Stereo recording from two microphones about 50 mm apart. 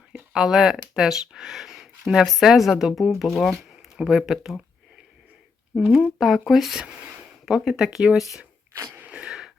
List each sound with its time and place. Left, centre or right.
0.3 s speech: centre
3.9 s speech: centre
5.8 s speech: centre
6.2 s speech: centre
9.0 s a sound: right